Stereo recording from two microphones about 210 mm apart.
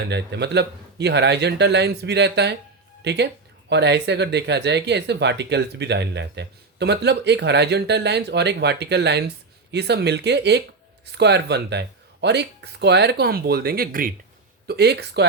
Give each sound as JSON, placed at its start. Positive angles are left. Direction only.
{"t": 0.0, "sound": "speech", "side_deg": -55}